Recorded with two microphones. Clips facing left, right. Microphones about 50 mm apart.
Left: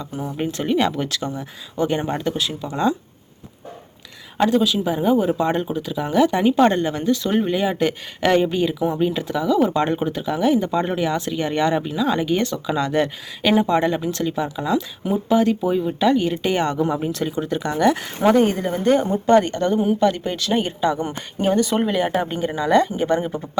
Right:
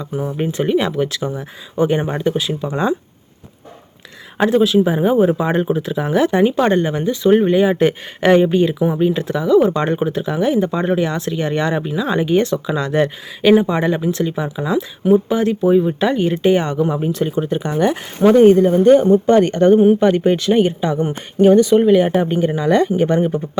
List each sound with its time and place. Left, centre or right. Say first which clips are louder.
0.0 s speech: right 4 dB; centre
4.6 s speech: right 5 dB; centre
5.6 s speech: right 6 dB; right
6.0 s speech: right 2 dB; centre
15.7 s speech: right 4 dB; centre
18.8 s speech: right 8 dB; right
21.7 s speech: right 9 dB; centre
22.1 s speech: right 6 dB; right